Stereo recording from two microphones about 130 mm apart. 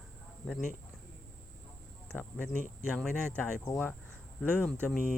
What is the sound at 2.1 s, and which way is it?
Speech, 10° left (ahead or behind).